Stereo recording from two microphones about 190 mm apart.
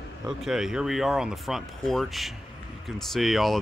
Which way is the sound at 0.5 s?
5° right (ahead or behind).